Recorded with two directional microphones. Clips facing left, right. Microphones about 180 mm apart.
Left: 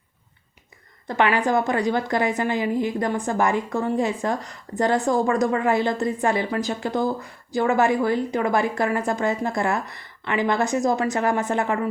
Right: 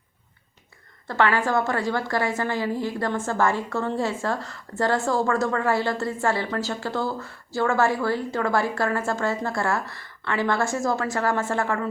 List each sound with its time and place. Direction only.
1.0 s a woman's voice: 15° left (ahead or behind)